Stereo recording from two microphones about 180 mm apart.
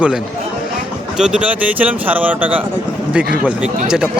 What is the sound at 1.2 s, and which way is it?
Speech, 5° right (ahead or behind).